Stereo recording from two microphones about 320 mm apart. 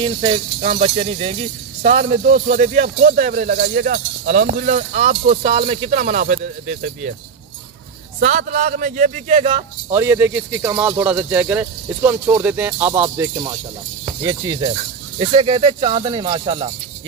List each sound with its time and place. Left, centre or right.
0.0 s speech: centre
8.2 s a man's voice: right